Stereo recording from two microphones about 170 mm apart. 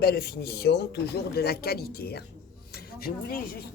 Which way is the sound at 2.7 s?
65° left (ahead or behind).